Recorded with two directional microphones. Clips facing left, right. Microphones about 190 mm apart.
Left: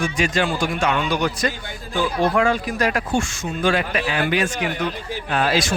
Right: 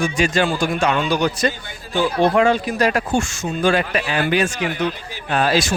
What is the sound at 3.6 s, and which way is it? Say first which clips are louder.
Speech: right 2 dB; 40° right (ahead or behind).